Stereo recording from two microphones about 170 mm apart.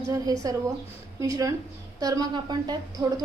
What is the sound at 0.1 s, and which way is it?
A woman's voice, 20° right (ahead or behind).